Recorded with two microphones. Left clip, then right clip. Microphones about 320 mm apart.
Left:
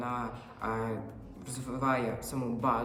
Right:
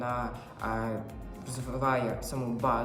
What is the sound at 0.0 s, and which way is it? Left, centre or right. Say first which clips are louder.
Music: right 3 dB; centre.